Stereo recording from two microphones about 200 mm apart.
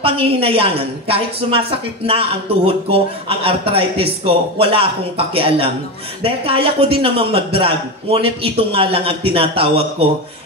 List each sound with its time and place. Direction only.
0.0 s a man's voice: 30° right (ahead or behind)